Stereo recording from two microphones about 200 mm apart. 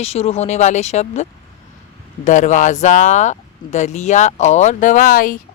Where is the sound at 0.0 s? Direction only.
30° left (ahead or behind).